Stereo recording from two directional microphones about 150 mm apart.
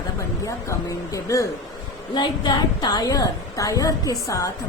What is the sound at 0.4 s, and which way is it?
A woman's voice, 20° left (ahead or behind).